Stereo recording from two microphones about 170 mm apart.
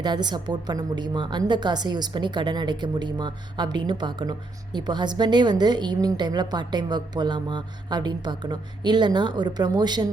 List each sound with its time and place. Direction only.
0.0 s a woman's voice: 25° right (ahead or behind)